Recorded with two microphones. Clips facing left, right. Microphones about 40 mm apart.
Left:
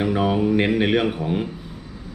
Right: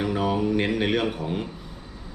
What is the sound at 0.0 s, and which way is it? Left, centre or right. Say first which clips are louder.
Speech: left 4 dB; centre.